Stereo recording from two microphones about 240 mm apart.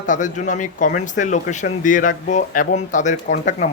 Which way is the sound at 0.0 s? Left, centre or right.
Left.